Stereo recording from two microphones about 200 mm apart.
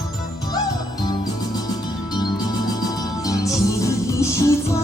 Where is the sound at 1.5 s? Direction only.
20° left (ahead or behind).